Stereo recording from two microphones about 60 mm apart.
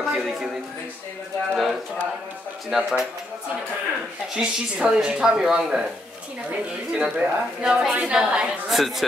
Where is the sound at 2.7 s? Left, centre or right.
Centre.